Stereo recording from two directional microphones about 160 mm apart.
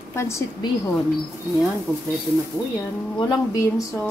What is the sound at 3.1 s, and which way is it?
Speech, 25° left (ahead or behind).